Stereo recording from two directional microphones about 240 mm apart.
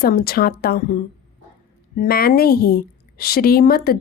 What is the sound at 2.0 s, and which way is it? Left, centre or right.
A woman's voice, left.